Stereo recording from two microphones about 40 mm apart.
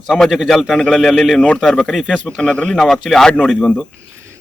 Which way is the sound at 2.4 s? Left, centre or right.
Left.